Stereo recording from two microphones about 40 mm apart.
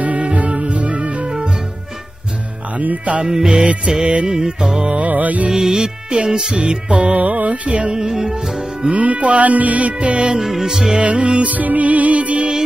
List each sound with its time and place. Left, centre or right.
0.0 s music: right
2.8 s music: right
3.3 s music: centre
4.0 s music: right
4.3 s music: centre
4.9 s music: right
5.5 s music: centre
8.9 s music: right
10.4 s music: centre
11.0 s music: right
11.5 s music: right